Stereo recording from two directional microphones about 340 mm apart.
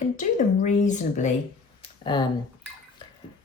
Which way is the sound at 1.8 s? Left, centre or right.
Centre.